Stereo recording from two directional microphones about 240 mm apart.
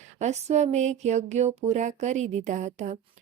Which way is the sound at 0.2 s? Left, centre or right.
Right.